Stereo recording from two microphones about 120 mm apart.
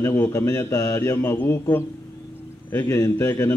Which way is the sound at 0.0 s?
20° left (ahead or behind).